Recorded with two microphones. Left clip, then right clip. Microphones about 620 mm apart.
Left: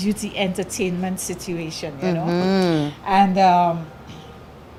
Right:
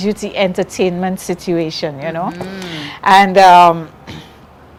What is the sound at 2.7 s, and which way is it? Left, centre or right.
Speech, right.